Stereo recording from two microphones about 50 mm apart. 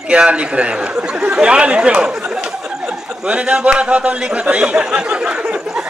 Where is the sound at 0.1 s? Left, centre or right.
Right.